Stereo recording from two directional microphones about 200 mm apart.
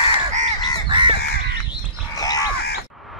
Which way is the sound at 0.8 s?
25° right (ahead or behind).